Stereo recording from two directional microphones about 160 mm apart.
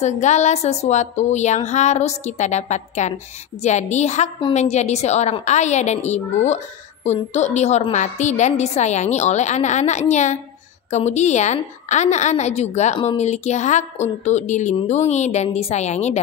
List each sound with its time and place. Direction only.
0.0 s a woman's voice: 45° left (ahead or behind)